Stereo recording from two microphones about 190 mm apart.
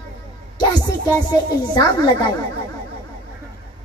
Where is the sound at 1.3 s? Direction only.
20° left (ahead or behind).